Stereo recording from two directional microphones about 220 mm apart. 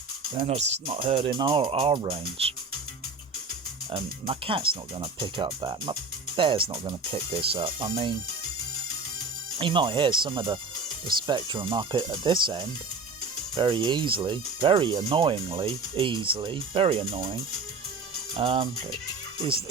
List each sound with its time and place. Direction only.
0.3 s speech: 30° right (ahead or behind)
3.9 s speech: 25° right (ahead or behind)
9.6 s speech: 20° right (ahead or behind)
18.3 s speech: 25° right (ahead or behind)